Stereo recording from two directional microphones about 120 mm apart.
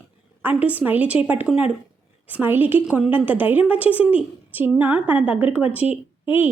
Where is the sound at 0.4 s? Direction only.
15° right (ahead or behind).